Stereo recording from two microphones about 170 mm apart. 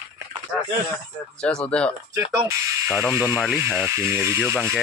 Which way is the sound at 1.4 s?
5° left (ahead or behind).